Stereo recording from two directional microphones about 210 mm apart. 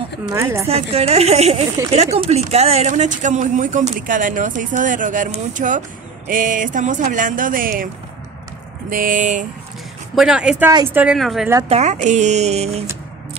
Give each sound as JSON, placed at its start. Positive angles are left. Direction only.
{"t": 0.3, "sound": "speech", "side_deg": -10}
{"t": 0.7, "sound": "a woman's voice", "side_deg": -30}
{"t": 8.9, "sound": "speech", "side_deg": -40}
{"t": 10.1, "sound": "speech", "side_deg": -5}
{"t": 11.7, "sound": "speech", "side_deg": -35}